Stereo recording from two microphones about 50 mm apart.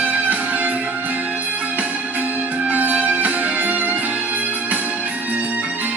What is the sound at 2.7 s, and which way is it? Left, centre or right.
Music, right.